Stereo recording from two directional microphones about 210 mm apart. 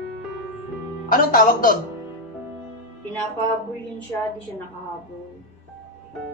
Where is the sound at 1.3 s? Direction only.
40° left (ahead or behind).